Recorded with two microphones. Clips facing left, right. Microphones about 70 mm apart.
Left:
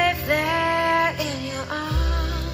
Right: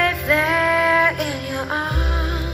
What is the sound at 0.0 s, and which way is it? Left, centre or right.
Music, right.